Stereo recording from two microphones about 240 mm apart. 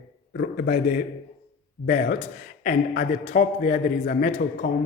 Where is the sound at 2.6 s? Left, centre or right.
Left.